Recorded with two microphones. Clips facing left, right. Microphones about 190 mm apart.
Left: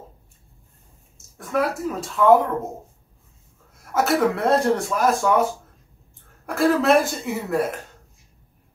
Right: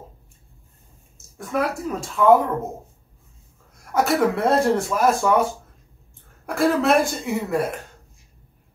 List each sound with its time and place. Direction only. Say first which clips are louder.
1.1 s speech: left 1 dB; centre (ahead or behind)
3.7 s speech: even; centre (ahead or behind)